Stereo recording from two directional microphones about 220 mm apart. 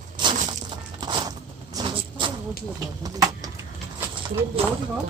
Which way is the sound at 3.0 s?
15° right (ahead or behind).